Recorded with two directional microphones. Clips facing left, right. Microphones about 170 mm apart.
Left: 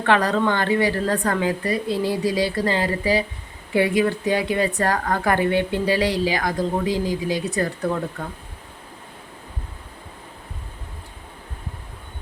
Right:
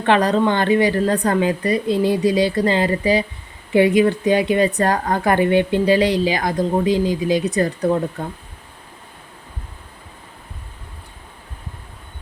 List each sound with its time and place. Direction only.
0.0 s speech: 20° right (ahead or behind)